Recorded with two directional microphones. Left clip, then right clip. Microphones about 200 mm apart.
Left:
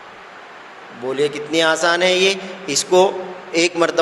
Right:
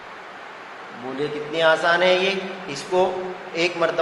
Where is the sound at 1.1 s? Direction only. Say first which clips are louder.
Left 6 dB; 55° left (ahead or behind).